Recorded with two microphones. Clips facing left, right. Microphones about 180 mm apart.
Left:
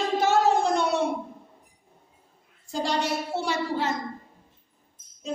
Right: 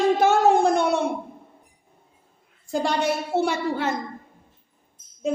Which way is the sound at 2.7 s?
55° right (ahead or behind).